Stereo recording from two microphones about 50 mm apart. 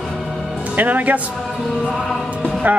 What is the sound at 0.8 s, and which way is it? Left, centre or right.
Speech, right.